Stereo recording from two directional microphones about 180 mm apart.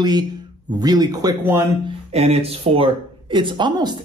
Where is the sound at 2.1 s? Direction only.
35° right (ahead or behind).